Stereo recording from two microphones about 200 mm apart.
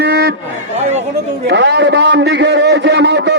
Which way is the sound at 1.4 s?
60° right (ahead or behind).